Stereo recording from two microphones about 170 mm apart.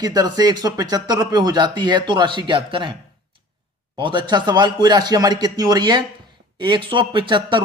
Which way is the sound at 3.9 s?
30° right (ahead or behind).